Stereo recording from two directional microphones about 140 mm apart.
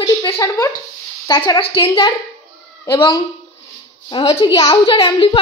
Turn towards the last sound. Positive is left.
turn(degrees=40)  # may be behind; listen again after turning